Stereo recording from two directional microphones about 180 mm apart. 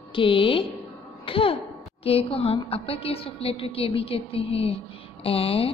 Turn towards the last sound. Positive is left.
turn(degrees=30)  # may be behind; listen again after turning